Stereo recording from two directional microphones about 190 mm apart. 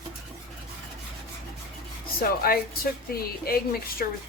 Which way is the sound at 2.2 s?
50° left (ahead or behind).